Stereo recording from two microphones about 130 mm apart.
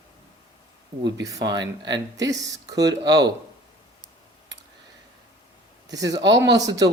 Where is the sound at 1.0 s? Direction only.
25° right (ahead or behind).